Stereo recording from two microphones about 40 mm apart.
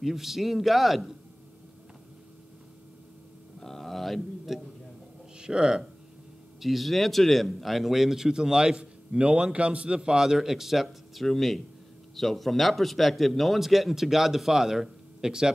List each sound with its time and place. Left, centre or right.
0.0 s a man's voice: centre
3.5 s a sound: centre
5.4 s speech: right
6.6 s a man's voice: centre
11.2 s a man's voice: centre